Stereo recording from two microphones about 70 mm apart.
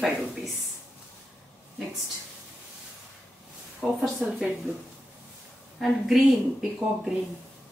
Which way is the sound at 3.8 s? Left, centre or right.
Centre.